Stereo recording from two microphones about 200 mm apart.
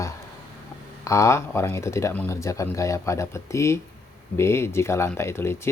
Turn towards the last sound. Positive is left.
turn(degrees=15)  # may be behind; listen again after turning